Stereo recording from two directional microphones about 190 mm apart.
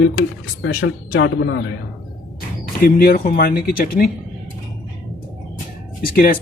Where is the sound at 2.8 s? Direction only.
50° left (ahead or behind).